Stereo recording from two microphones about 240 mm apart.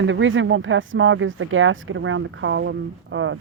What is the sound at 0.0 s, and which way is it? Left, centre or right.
Speech, right.